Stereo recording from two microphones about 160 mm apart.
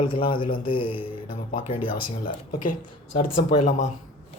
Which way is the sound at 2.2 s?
60° left (ahead or behind).